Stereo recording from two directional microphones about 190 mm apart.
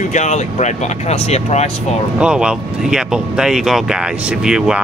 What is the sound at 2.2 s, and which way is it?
Speech, 5° right (ahead or behind).